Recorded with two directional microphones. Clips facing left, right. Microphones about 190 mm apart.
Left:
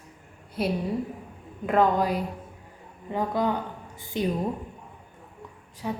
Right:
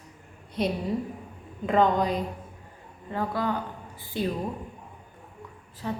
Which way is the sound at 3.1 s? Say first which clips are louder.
Left 2 dB; 15° left (ahead or behind).